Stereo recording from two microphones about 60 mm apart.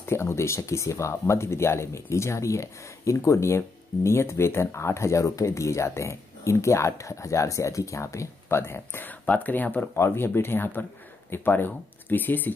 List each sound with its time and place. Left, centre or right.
0.0 s speech: left
9.2 s speech: left
9.9 s speech: left